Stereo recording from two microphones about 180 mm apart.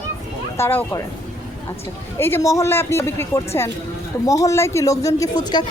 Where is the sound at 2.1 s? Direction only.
15° left (ahead or behind).